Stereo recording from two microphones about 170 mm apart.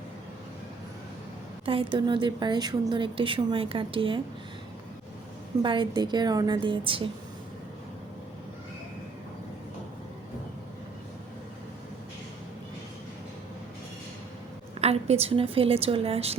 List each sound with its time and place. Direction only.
1.6 s a woman's voice: 30° right (ahead or behind)
5.6 s a woman's voice: 30° right (ahead or behind)
14.8 s a woman's voice: 35° right (ahead or behind)